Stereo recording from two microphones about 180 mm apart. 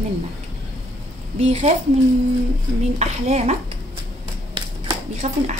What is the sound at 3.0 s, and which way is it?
Speech, 40° right (ahead or behind).